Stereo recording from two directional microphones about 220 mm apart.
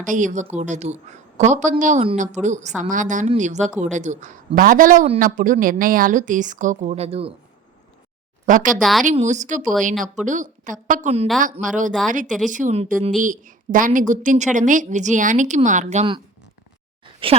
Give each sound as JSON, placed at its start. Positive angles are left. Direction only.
{"t": 0.0, "sound": "a man's voice", "side_deg": -35}
{"t": 8.4, "sound": "a man's voice", "side_deg": -35}
{"t": 8.8, "sound": "speech", "side_deg": 0}
{"t": 9.0, "sound": "a man's voice", "side_deg": -30}
{"t": 17.2, "sound": "speech", "side_deg": -25}